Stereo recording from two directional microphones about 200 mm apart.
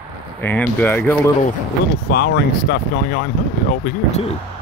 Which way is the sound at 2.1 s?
55° left (ahead or behind).